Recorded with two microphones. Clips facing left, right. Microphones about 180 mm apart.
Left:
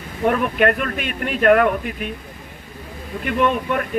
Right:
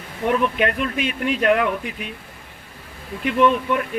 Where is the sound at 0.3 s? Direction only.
50° left (ahead or behind).